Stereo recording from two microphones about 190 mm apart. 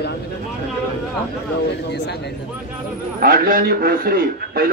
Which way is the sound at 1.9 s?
60° left (ahead or behind).